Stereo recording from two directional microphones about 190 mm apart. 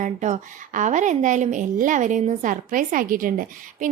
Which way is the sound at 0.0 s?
40° right (ahead or behind).